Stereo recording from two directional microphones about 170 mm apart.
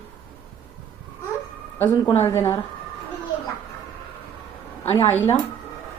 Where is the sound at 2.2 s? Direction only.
15° left (ahead or behind).